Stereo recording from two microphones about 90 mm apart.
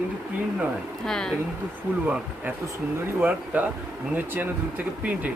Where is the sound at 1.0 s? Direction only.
5° left (ahead or behind).